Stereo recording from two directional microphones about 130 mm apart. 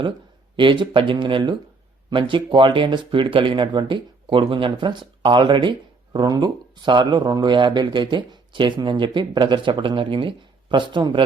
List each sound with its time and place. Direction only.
0.5 s speech: 40° right (ahead or behind)